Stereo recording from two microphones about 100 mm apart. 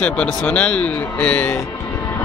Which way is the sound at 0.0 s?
10° left (ahead or behind).